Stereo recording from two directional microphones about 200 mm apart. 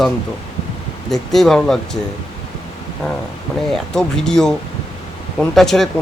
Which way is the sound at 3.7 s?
Centre (ahead or behind).